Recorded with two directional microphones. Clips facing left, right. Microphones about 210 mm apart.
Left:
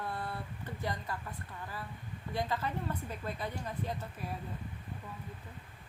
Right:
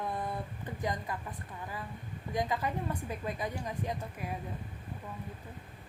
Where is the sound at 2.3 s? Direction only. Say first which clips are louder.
Right 2 dB; 15° right (ahead or behind).